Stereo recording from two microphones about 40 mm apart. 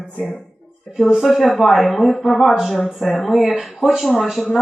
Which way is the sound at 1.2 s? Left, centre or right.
Centre.